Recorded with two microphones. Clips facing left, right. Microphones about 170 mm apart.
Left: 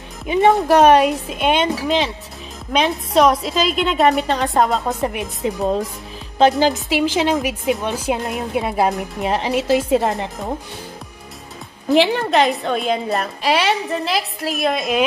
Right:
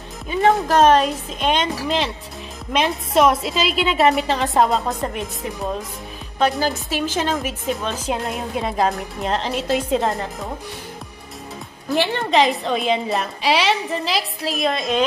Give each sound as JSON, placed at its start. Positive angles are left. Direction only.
{"t": 0.3, "sound": "a woman's voice", "side_deg": 15}
{"t": 5.4, "sound": "a woman's voice", "side_deg": 20}
{"t": 11.9, "sound": "a woman's voice", "side_deg": 15}
{"t": 12.2, "sound": "a woman's voice", "side_deg": 0}